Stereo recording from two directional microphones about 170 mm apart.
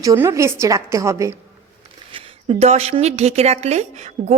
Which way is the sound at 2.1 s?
35° right (ahead or behind).